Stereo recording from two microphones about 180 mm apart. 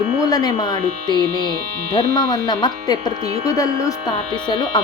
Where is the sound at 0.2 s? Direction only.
20° left (ahead or behind).